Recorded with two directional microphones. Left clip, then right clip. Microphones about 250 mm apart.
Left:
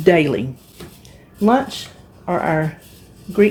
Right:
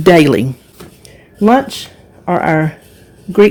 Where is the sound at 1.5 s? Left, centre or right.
Right.